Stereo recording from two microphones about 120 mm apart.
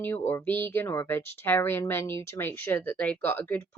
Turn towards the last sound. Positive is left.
turn(degrees=15)  # may be behind; listen again after turning